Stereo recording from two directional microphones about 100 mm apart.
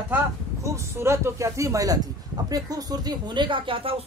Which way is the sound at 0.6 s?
30° right (ahead or behind).